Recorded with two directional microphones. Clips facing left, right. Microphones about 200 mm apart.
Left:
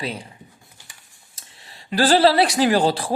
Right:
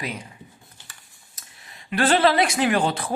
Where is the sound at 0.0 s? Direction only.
30° left (ahead or behind).